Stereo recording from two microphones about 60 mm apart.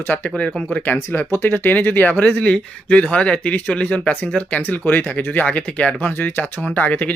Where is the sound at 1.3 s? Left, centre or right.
Left; by 6.0 s centre.